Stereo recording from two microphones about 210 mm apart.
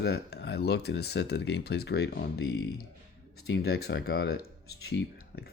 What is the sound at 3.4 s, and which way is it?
Speech, 50° left (ahead or behind).